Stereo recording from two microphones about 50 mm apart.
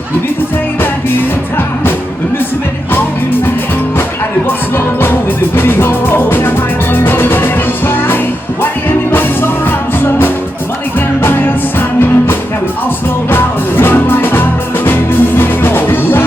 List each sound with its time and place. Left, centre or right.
5.5 s music: left
10.0 s music: left